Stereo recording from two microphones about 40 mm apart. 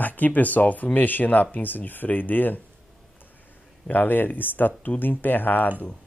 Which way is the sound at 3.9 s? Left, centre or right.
Left.